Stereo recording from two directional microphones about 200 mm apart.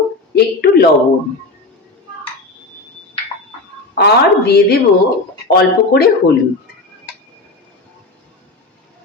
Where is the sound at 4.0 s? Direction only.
55° left (ahead or behind).